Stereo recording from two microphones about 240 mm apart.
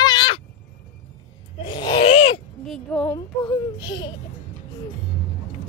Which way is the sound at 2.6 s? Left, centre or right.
Centre.